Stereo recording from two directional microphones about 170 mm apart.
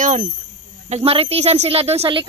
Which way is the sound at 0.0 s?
45° right (ahead or behind).